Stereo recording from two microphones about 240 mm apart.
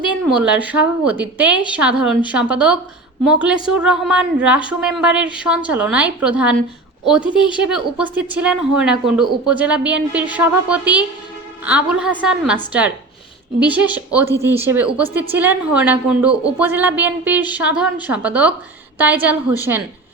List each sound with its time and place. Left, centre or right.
0.1 s a woman's voice: centre